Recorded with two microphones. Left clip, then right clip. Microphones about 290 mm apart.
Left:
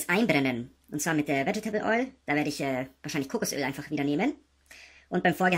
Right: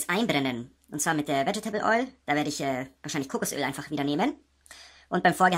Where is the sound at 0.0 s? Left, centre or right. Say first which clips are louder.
Left 1 dB; centre.